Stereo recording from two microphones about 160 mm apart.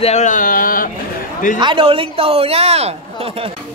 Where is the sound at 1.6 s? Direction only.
30° right (ahead or behind).